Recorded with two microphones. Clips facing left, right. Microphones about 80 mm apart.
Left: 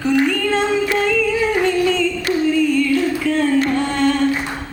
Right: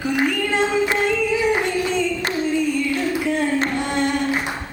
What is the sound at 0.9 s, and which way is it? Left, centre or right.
Singing, right.